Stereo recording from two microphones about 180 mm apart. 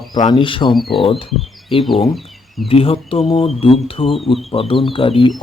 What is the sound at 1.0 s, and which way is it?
Speech, 30° left (ahead or behind).